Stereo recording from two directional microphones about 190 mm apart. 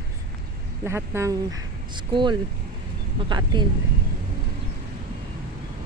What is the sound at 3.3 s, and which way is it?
Speech, 25° right (ahead or behind).